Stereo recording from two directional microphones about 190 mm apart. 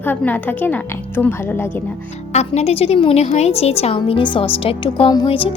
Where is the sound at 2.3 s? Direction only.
35° left (ahead or behind).